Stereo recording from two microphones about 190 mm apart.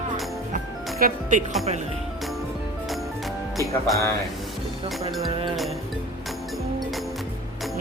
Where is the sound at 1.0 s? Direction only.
40° right (ahead or behind).